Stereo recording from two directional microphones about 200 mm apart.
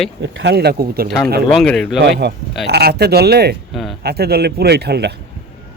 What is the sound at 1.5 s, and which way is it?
Speech, 5° left (ahead or behind).